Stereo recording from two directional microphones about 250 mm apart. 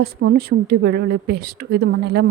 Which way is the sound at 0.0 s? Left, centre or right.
Right.